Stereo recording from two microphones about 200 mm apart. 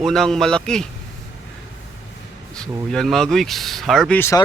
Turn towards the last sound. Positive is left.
turn(degrees=10)  # may be behind; listen again after turning